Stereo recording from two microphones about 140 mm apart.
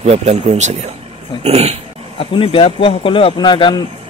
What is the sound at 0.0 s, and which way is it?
Speech, 45° right (ahead or behind).